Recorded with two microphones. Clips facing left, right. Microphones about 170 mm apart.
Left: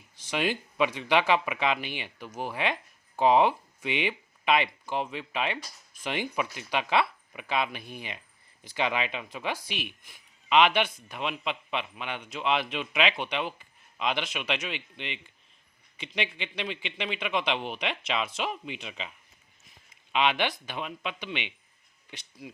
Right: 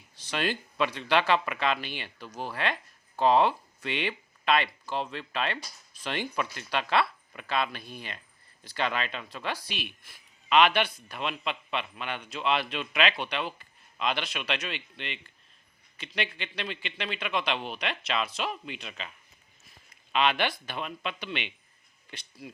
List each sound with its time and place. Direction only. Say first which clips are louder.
0.3 s speech: left 2 dB; 15° left (ahead or behind)
20.1 s speech: even; 15° left (ahead or behind)